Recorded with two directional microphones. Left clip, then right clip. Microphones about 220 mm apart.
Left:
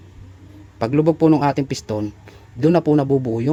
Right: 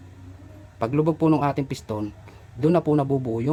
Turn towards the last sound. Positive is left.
turn(degrees=20)  # may be behind; listen again after turning